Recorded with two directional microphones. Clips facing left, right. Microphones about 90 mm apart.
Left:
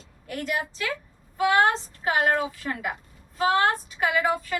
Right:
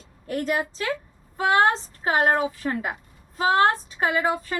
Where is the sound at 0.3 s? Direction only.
35° right (ahead or behind).